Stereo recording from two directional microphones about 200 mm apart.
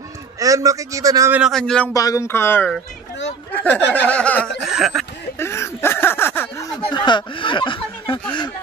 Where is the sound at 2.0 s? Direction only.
15° left (ahead or behind); by 5.0 s centre (ahead or behind).